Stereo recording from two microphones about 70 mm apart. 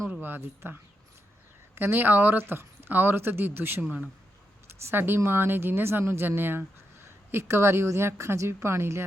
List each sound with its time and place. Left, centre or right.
0.1 s speech: right